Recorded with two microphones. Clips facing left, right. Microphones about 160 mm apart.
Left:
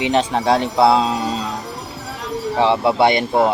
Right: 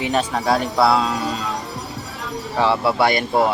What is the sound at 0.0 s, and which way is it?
Speech, 25° left (ahead or behind).